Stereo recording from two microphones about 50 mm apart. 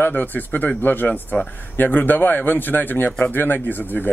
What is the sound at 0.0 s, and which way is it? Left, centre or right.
Speech, left.